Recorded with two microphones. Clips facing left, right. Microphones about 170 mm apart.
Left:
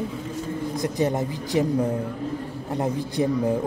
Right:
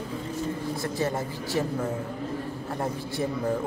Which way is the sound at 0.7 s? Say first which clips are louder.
Left 7 dB; 20° left (ahead or behind).